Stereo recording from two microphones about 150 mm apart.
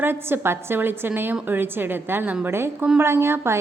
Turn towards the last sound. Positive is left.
turn(degrees=-15)  # may be behind; listen again after turning